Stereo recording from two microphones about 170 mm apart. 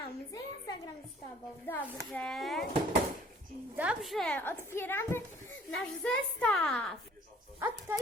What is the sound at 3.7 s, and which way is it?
A woman's voice, 5° right (ahead or behind).